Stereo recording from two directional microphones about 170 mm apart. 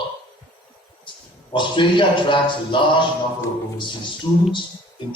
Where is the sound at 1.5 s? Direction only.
30° left (ahead or behind).